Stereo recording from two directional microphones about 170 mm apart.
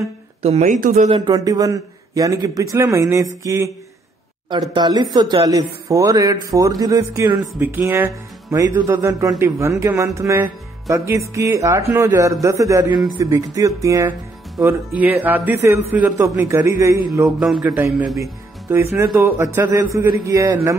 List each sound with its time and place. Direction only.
0.4 s speech: 40° right (ahead or behind)
1.1 s speech: 25° right (ahead or behind)